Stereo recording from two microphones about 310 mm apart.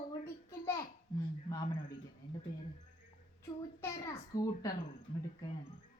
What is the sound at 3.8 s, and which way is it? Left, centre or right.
Speech, centre.